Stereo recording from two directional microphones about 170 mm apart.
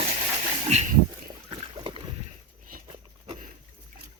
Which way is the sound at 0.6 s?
40° right (ahead or behind).